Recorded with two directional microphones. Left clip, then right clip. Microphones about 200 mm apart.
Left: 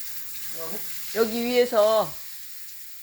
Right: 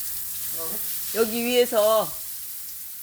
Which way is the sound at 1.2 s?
20° right (ahead or behind).